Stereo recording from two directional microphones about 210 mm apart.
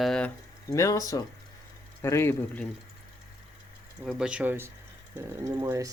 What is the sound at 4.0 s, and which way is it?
Speech, centre (ahead or behind).